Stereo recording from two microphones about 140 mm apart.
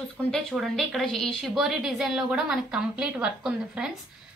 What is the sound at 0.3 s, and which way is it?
A woman's voice, centre (ahead or behind).